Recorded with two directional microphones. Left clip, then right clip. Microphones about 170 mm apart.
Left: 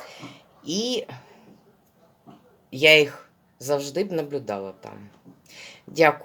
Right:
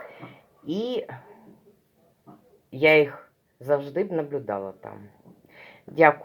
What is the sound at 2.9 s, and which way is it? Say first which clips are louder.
Speech: left 2 dB; 20° left (ahead or behind).